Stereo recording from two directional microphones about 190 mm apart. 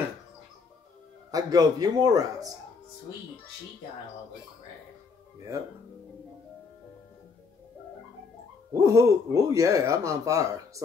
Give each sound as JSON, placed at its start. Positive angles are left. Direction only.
{"t": 1.3, "sound": "a man's voice", "side_deg": -20}
{"t": 8.7, "sound": "speech", "side_deg": -15}